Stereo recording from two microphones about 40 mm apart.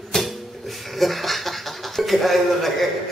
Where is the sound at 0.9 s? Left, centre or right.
Centre.